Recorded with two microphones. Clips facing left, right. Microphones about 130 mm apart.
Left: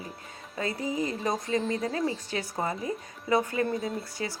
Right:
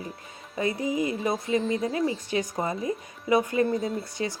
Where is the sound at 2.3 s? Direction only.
15° right (ahead or behind).